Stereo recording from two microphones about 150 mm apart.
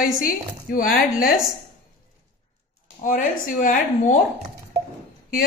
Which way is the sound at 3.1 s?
60° left (ahead or behind).